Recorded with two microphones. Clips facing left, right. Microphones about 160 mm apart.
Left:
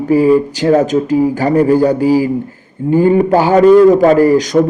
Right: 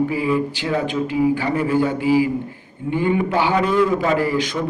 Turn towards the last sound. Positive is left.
turn(degrees=40)  # may be behind; listen again after turning